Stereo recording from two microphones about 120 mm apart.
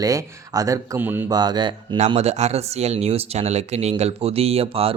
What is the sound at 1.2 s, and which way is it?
Speech, 35° right (ahead or behind).